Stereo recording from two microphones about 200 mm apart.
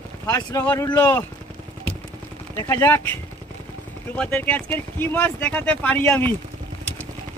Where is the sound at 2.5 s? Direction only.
15° left (ahead or behind).